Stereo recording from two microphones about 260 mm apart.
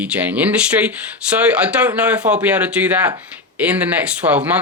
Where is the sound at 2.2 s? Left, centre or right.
Right.